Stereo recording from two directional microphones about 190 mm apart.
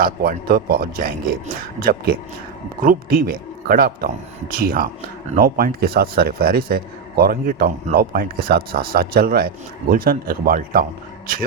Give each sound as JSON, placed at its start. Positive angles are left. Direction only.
{"t": 0.0, "sound": "a man's voice", "side_deg": -50}